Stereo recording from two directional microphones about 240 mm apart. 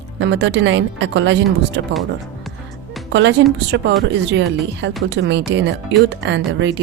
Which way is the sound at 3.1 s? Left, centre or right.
Right.